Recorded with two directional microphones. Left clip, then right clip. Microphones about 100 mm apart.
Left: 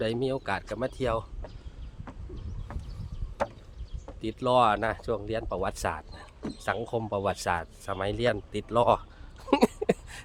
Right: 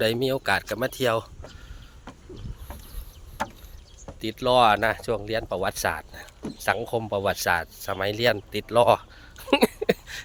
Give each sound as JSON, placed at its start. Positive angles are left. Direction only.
{"t": 0.0, "sound": "speech", "side_deg": -15}
{"t": 4.2, "sound": "speech", "side_deg": 5}
{"t": 5.7, "sound": "speech", "side_deg": 15}
{"t": 7.6, "sound": "speech", "side_deg": 5}
{"t": 9.4, "sound": "a sound", "side_deg": 25}